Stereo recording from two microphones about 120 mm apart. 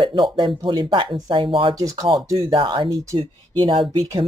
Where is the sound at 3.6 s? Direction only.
45° right (ahead or behind).